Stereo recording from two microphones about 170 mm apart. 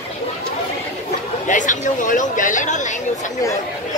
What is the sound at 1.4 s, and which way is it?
Chatter, 45° left (ahead or behind).